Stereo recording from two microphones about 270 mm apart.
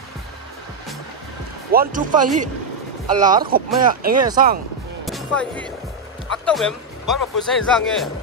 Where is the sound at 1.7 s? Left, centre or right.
Right.